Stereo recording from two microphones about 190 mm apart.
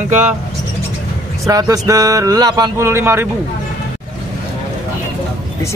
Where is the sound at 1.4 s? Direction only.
20° right (ahead or behind).